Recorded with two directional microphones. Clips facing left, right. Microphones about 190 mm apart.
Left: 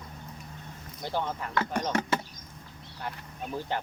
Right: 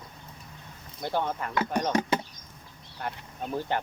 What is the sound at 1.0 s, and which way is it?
Speech, 55° right (ahead or behind).